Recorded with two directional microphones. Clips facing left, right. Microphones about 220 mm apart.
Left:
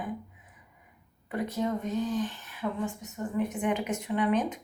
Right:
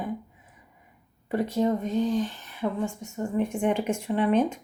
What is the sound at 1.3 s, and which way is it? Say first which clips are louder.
Speech: right 6 dB; 30° right (ahead or behind).